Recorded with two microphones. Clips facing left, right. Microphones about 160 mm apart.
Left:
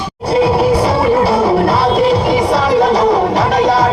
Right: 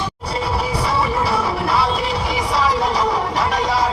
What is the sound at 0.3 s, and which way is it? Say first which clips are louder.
Music: left 13 dB; 70° left (ahead or behind).